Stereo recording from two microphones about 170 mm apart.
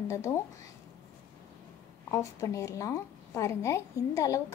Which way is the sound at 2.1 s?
20° left (ahead or behind).